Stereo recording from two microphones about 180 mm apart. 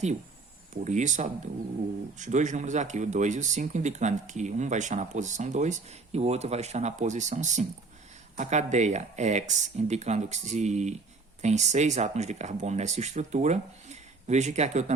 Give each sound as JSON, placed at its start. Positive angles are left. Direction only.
{"t": 0.9, "sound": "speech", "side_deg": -40}